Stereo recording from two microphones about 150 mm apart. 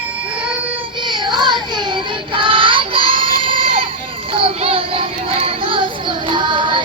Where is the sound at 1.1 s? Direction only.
30° right (ahead or behind).